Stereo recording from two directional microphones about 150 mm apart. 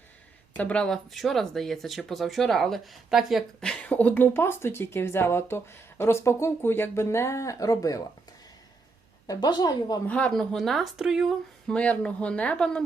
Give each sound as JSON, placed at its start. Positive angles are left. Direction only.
{"t": 0.5, "sound": "speech", "side_deg": 10}
{"t": 9.2, "sound": "a woman's voice", "side_deg": 25}
{"t": 10.1, "sound": "speech", "side_deg": 10}